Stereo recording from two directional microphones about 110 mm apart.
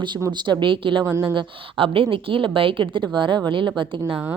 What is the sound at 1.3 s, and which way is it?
A woman's voice, 55° right (ahead or behind).